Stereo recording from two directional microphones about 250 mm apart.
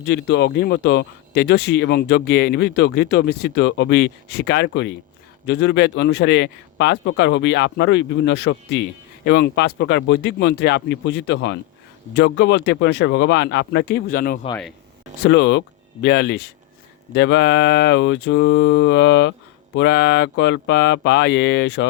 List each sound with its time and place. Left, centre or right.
0.0 s speech: left
15.2 s speech: left